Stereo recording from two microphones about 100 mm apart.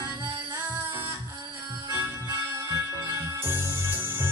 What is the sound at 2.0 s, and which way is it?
Music, 30° right (ahead or behind).